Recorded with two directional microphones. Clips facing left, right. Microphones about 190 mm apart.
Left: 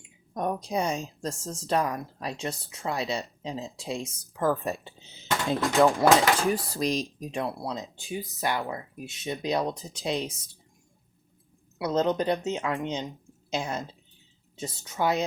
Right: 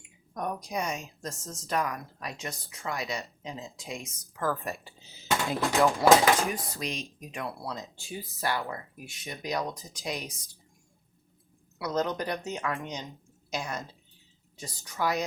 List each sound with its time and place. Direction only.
0.3 s a woman's voice: 25° left (ahead or behind)
11.8 s a woman's voice: 25° left (ahead or behind)